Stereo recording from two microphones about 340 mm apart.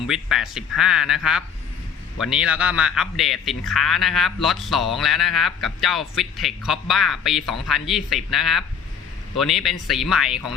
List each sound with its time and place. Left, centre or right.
0.1 s a man's voice: centre